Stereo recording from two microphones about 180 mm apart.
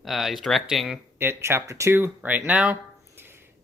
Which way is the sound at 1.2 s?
15° right (ahead or behind).